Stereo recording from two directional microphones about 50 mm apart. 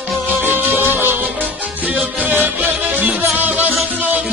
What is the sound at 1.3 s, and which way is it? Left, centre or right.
Music, right.